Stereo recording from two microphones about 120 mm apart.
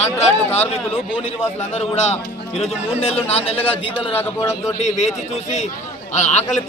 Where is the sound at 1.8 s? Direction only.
65° left (ahead or behind).